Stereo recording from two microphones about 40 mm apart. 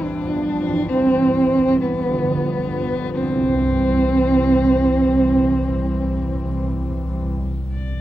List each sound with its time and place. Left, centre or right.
0.3 s music: left